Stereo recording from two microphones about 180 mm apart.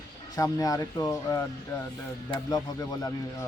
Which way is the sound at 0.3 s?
20° left (ahead or behind).